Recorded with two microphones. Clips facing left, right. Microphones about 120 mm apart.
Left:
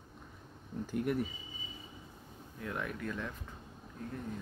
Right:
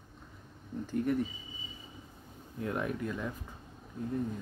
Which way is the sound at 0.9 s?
10° left (ahead or behind).